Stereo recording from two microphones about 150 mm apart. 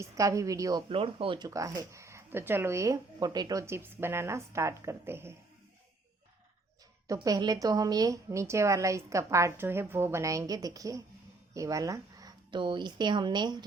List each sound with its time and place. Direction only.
0.0 s a woman's voice: 20° right (ahead or behind)
0.9 s speech: 40° right (ahead or behind)
1.5 s a woman's voice: 20° right (ahead or behind)
7.1 s a woman's voice: 25° right (ahead or behind)